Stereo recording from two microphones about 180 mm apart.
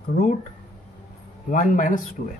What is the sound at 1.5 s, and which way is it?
Speech, 50° left (ahead or behind).